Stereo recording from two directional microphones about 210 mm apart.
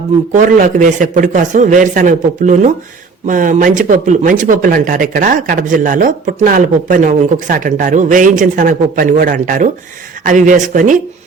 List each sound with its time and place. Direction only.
0.3 s speech: 40° right (ahead or behind)